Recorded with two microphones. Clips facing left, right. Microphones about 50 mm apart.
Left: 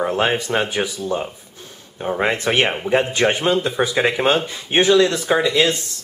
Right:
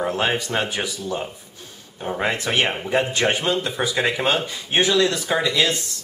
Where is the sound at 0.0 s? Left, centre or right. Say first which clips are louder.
Left 3 dB; left.